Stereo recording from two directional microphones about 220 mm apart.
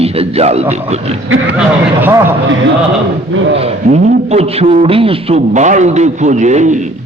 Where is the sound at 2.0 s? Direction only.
10° right (ahead or behind).